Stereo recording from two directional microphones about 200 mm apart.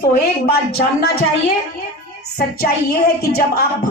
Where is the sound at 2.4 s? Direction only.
50° left (ahead or behind).